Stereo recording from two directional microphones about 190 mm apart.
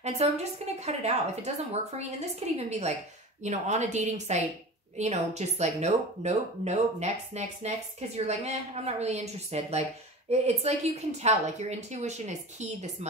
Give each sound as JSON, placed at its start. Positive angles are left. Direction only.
{"t": 0.0, "sound": "a woman's voice", "side_deg": -35}